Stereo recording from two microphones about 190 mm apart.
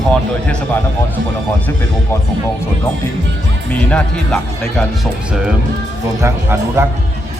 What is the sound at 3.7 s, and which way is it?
Speech, 5° left (ahead or behind).